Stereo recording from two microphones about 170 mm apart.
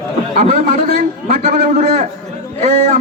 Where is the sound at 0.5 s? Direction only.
45° right (ahead or behind).